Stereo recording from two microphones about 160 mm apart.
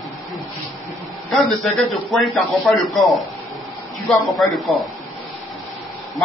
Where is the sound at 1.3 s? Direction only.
Centre (ahead or behind).